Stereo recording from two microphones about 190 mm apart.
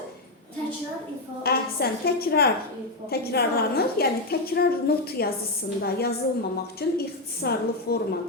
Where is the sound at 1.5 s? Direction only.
55° left (ahead or behind).